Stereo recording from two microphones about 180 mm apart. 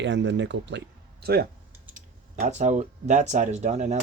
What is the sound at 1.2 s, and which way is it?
Speech, 60° right (ahead or behind).